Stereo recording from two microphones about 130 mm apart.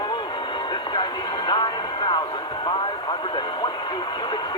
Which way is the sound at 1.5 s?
35° left (ahead or behind).